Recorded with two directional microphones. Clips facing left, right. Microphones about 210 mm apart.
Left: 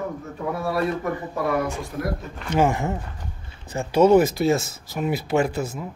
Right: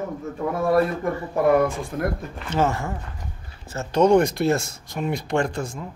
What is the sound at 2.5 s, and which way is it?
Speech, 15° left (ahead or behind).